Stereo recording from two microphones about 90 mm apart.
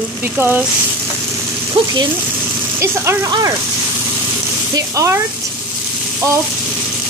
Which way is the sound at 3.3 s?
45° right (ahead or behind).